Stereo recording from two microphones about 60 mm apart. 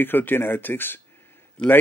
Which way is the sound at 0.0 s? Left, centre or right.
Left.